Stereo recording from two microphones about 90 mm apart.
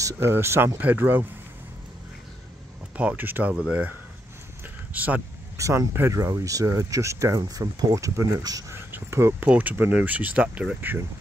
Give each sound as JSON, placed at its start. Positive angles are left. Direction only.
{"t": 0.0, "sound": "speech", "side_deg": -30}
{"t": 3.0, "sound": "speech", "side_deg": -20}
{"t": 4.9, "sound": "speech", "side_deg": -20}
{"t": 5.6, "sound": "speech", "side_deg": -35}
{"t": 8.7, "sound": "whispering", "side_deg": -30}
{"t": 9.5, "sound": "speech", "side_deg": -20}
{"t": 10.8, "sound": "speech", "side_deg": -20}